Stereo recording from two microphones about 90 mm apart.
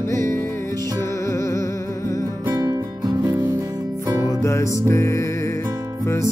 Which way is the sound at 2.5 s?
45° right (ahead or behind).